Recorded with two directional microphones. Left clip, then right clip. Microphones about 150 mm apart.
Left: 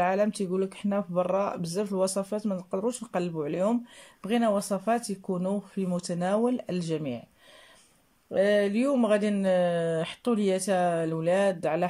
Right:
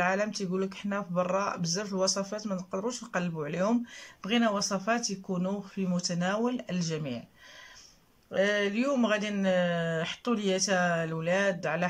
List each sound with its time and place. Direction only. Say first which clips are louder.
0.0 s speech: left 3 dB; 25° left (ahead or behind)
8.3 s speech: left 4 dB; 30° left (ahead or behind)